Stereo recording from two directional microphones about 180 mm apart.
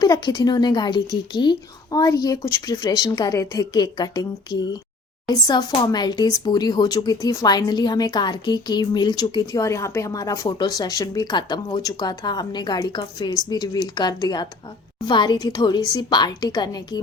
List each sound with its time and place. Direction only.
0.0 s speech: 20° left (ahead or behind)